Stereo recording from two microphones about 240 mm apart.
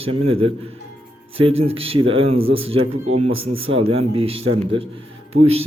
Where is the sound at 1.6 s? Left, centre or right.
Right.